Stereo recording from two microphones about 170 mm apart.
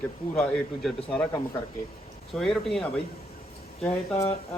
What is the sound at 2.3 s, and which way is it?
Speech, centre (ahead or behind).